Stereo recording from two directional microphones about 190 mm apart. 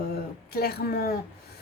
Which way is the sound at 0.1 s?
55° left (ahead or behind).